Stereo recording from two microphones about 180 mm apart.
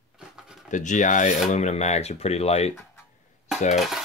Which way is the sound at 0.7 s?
45° left (ahead or behind).